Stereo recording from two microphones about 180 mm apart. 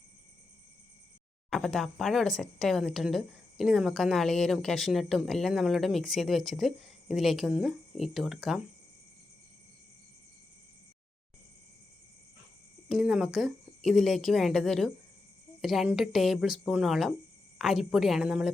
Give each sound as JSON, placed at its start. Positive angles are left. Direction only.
{"t": 1.5, "sound": "speech", "side_deg": 0}
{"t": 12.9, "sound": "speech", "side_deg": -5}